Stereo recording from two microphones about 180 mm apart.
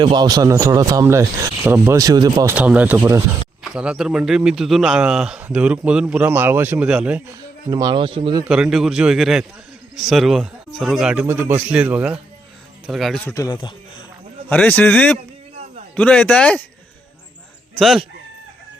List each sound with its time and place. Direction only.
0.0 s speech: 25° right (ahead or behind)
2.6 s speech: 10° right (ahead or behind)
7.7 s speech: 20° right (ahead or behind)
8.4 s speech: 5° right (ahead or behind)
13.2 s speech: 20° left (ahead or behind)
14.5 s speech: 10° left (ahead or behind)
17.7 s speech: centre (ahead or behind)